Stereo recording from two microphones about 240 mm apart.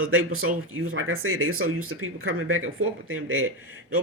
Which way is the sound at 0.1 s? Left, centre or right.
Right.